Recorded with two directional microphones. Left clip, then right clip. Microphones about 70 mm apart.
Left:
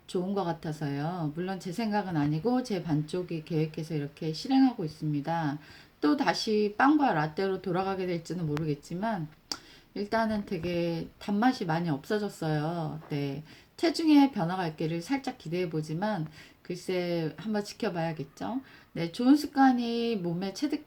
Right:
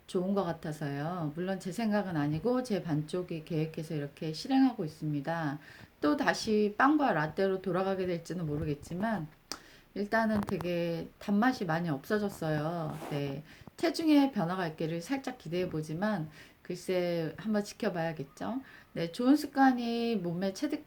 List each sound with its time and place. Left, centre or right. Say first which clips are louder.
0.1 s speech: left 1 dB; left